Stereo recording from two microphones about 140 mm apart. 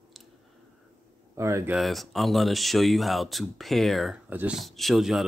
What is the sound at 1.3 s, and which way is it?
Speech, 20° right (ahead or behind).